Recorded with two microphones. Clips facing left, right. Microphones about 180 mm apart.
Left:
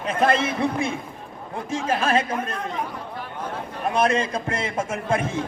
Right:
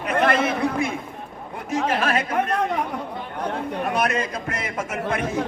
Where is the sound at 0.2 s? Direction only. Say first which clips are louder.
Even; 30° left (ahead or behind).